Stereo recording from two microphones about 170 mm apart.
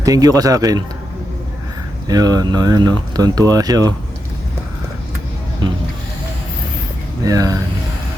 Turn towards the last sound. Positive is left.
turn(degrees=-20)  # may be behind; listen again after turning